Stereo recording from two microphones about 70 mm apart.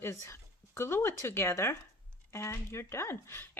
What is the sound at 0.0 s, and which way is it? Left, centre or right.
Speech, left.